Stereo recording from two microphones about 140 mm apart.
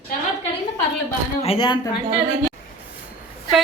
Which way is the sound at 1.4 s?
45° left (ahead or behind).